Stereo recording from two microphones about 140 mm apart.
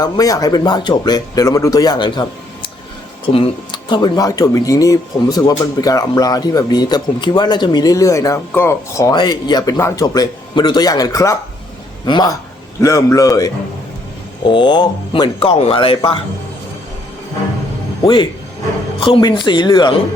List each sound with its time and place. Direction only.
0.0 s speech: 25° left (ahead or behind)
12.8 s speech: 20° left (ahead or behind)
14.4 s speech: 35° left (ahead or behind)
18.9 s speech: 35° left (ahead or behind)